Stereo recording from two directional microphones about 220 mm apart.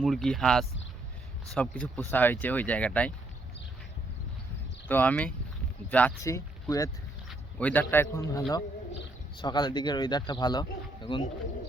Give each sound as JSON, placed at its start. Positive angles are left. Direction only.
{"t": 0.0, "sound": "speech", "side_deg": 0}
{"t": 4.9, "sound": "speech", "side_deg": 10}